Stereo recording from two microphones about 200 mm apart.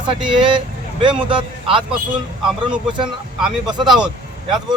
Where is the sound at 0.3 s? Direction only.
25° right (ahead or behind).